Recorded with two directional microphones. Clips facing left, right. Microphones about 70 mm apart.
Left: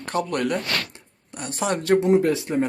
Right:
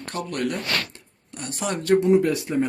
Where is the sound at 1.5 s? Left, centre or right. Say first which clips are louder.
Left 1 dB; left.